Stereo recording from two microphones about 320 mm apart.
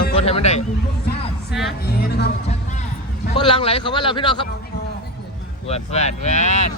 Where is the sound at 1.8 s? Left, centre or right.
Left.